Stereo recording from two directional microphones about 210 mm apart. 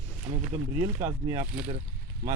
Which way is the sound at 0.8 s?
25° right (ahead or behind).